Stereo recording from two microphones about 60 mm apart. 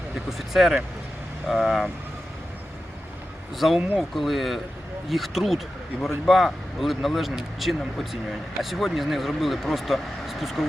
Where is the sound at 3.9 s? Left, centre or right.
Centre.